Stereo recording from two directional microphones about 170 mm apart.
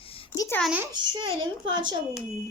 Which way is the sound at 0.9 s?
25° right (ahead or behind).